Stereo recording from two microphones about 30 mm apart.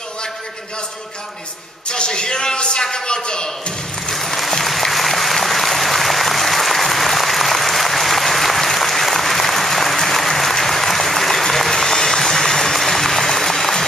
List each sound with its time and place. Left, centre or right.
1.9 s a man's voice: left
4.1 s applause: centre